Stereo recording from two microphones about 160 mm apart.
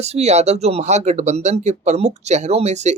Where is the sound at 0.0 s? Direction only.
45° right (ahead or behind).